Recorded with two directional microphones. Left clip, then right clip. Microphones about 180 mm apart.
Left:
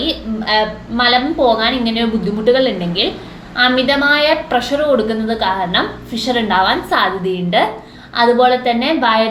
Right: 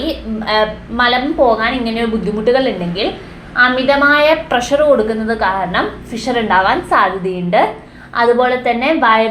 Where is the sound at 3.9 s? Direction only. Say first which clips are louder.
Right 2 dB; 15° right (ahead or behind).